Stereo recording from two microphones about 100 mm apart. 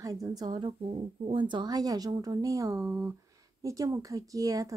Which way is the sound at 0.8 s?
75° right (ahead or behind).